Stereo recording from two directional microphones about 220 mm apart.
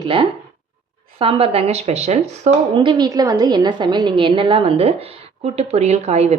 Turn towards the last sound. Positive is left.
turn(degrees=-30)  # may be behind; listen again after turning